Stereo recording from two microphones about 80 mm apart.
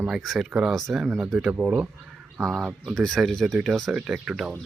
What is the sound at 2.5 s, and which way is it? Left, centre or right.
Speech, centre.